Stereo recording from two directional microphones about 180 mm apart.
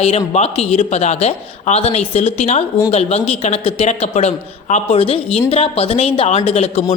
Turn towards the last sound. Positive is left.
turn(degrees=35)  # may be behind; listen again after turning